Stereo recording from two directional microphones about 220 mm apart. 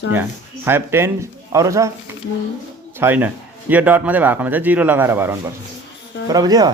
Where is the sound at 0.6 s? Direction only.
10° right (ahead or behind).